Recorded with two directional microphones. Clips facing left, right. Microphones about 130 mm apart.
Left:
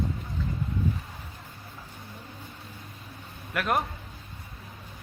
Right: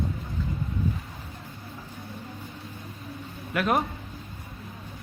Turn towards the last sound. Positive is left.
turn(degrees=0)  # may be behind; listen again after turning